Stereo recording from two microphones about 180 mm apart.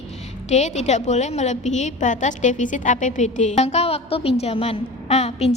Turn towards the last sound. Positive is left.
turn(degrees=35)  # may be behind; listen again after turning